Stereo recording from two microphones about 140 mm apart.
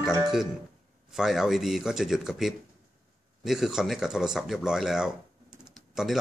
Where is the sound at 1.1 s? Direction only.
5° right (ahead or behind).